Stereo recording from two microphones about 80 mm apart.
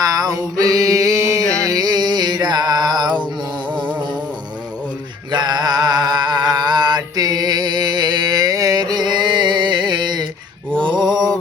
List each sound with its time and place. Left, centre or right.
0.0 s a sound: right
1.7 s music: right
5.3 s mantra: right